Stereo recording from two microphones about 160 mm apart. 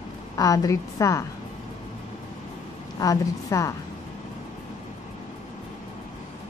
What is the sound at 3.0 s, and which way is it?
Speech, 20° left (ahead or behind).